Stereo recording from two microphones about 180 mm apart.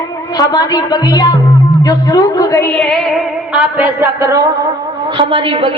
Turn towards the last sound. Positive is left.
turn(degrees=-30)  # may be behind; listen again after turning